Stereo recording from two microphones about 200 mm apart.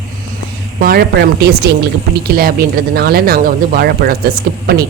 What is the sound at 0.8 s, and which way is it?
A woman's voice, 50° right (ahead or behind).